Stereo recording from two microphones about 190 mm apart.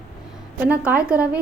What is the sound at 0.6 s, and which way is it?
Speech, 10° right (ahead or behind).